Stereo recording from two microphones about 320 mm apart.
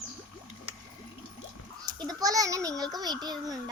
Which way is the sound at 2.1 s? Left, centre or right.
Centre.